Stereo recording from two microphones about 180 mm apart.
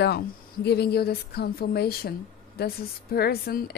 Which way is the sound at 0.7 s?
65° left (ahead or behind).